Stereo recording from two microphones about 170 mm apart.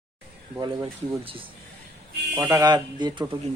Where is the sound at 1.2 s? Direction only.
30° right (ahead or behind).